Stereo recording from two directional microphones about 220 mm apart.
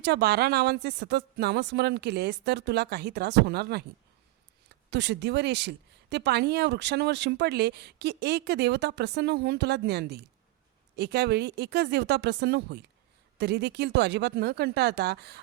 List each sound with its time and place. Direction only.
0.0 s speech: 50° right (ahead or behind)
4.9 s speech: 50° right (ahead or behind)